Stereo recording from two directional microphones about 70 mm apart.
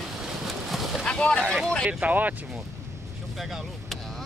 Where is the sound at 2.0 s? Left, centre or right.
Right.